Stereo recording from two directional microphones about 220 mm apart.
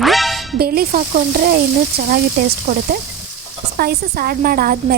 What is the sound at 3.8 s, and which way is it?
A woman's voice, 45° right (ahead or behind).